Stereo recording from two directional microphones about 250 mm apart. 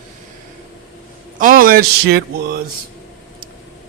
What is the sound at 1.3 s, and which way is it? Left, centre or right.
Mantra, right.